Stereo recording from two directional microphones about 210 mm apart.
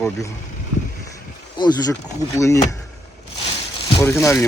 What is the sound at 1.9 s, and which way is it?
Speech, 15° left (ahead or behind).